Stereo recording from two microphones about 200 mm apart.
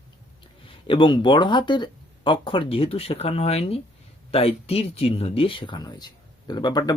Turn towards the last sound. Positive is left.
turn(degrees=20)  # may be behind; listen again after turning